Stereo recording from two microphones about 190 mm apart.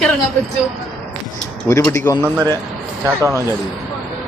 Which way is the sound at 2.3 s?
20° right (ahead or behind).